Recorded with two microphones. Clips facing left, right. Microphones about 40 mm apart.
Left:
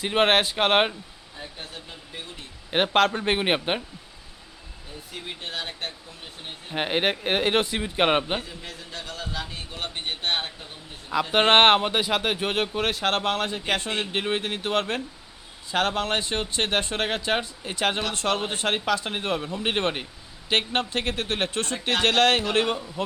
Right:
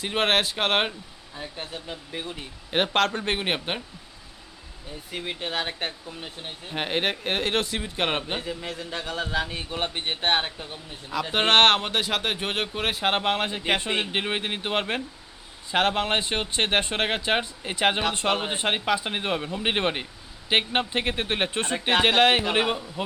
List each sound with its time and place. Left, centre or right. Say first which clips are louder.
0.0 s speech: left 3 dB; centre
2.6 s speech: left 2 dB; centre
5.5 s speech: right 3 dB; right
6.7 s speech: left 2 dB; centre
8.6 s speech: right 5 dB; right
11.1 s speech: left 2 dB; centre
11.8 s speech: left 2 dB; centre